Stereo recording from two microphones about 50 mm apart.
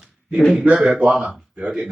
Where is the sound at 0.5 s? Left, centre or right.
Right.